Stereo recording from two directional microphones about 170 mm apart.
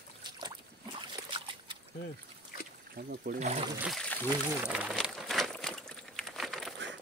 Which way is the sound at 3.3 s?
60° right (ahead or behind).